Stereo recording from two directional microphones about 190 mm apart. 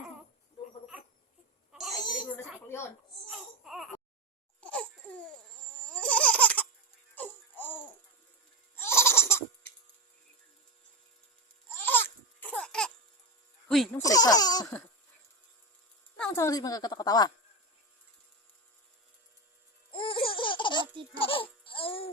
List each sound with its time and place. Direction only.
1.9 s a sound: 20° left (ahead or behind)
2.3 s a sound: 10° left (ahead or behind)
3.2 s baby cry: centre (ahead or behind)
4.6 s laughter: 5° left (ahead or behind)
7.2 s music: 10° left (ahead or behind)
8.7 s laughter: 15° left (ahead or behind)
11.7 s a sound: 10° left (ahead or behind)
13.7 s speech: centre (ahead or behind)
14.0 s a woman's voice: 20° left (ahead or behind)
16.1 s a woman's voice: 10° left (ahead or behind)
19.9 s baby laughter: 25° left (ahead or behind)